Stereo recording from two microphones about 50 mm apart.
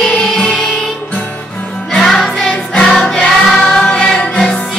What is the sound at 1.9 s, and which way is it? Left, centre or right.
Music, centre.